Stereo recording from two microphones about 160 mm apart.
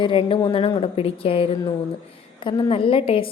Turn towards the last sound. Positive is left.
turn(degrees=35)  # may be behind; listen again after turning